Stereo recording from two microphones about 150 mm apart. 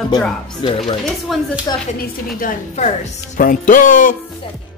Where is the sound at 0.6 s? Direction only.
35° left (ahead or behind).